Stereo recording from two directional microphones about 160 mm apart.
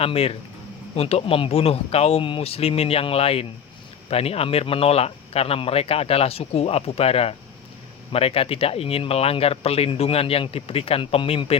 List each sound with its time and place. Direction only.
0.0 s speech: 35° left (ahead or behind)